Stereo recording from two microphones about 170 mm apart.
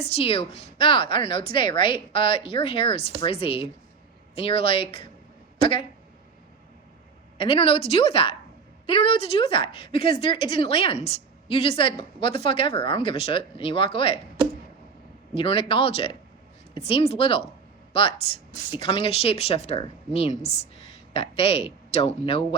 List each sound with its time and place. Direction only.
0.0 s a woman's voice: 35° left (ahead or behind)
7.3 s a woman's voice: 30° left (ahead or behind)
15.4 s a woman's voice: 30° left (ahead or behind)
18.7 s a woman's voice: 30° left (ahead or behind)